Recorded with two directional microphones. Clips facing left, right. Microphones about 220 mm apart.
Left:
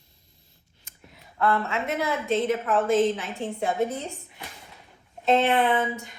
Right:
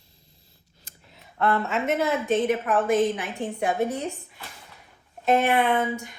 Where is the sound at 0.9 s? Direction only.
35° right (ahead or behind).